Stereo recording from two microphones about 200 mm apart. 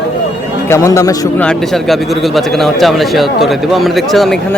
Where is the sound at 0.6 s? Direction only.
15° left (ahead or behind).